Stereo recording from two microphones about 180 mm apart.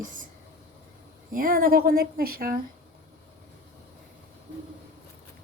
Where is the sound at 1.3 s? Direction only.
50° right (ahead or behind).